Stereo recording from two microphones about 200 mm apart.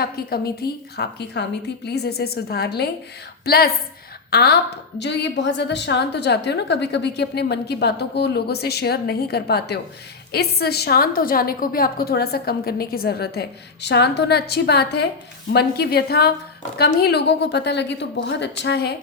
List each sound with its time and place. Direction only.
0.0 s a woman's voice: 50° left (ahead or behind)